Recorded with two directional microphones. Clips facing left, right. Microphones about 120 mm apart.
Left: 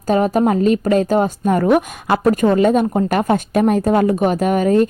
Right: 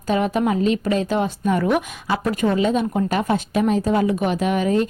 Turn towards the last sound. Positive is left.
turn(degrees=45)  # may be behind; listen again after turning